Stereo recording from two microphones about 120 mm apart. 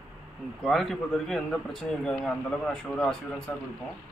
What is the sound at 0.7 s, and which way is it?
A man's voice, centre (ahead or behind).